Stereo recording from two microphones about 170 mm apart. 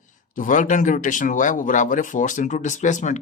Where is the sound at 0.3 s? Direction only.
50° left (ahead or behind).